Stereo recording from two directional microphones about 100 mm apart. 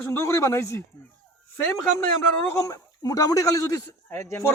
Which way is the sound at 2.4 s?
30° left (ahead or behind).